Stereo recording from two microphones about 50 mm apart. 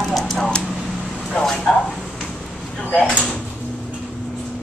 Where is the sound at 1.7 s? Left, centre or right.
Centre.